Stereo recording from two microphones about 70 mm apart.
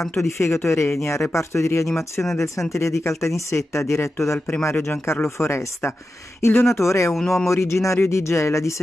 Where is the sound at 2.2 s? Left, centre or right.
Centre.